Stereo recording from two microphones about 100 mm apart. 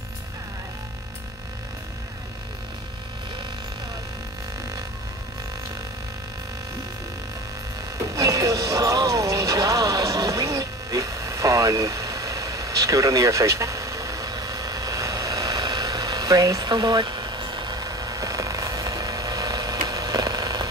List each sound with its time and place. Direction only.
8.1 s music: 35° right (ahead or behind)